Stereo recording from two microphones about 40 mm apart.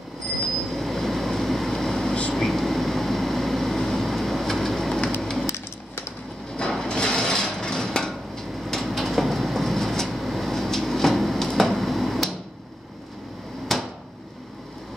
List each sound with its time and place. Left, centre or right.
0.7 s train: centre
2.3 s vehicle: centre
5.2 s a sound: centre
6.9 s a sound: centre
8.5 s train: centre
8.8 s train: centre
13.7 s drawer open or close: centre